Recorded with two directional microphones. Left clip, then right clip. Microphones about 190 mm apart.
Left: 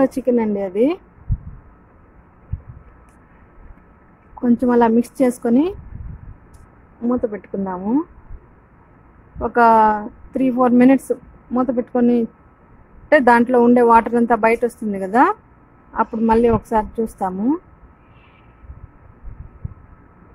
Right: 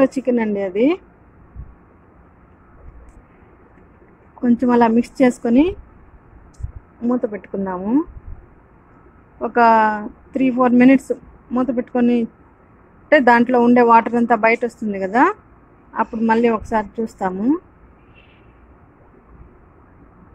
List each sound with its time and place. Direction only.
0.0 s a woman's voice: 15° left (ahead or behind)
4.4 s a woman's voice: 15° left (ahead or behind)
7.0 s a woman's voice: 15° left (ahead or behind)
9.4 s a woman's voice: 15° left (ahead or behind)